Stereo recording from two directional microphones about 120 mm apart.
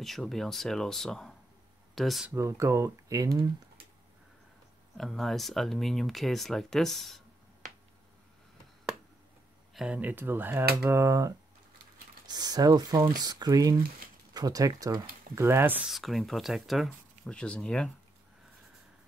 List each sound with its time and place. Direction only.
0.0 s speech: centre (ahead or behind)
2.3 s speech: 25° right (ahead or behind)
4.9 s speech: centre (ahead or behind)
9.8 s speech: 10° right (ahead or behind)
15.9 s speech: centre (ahead or behind)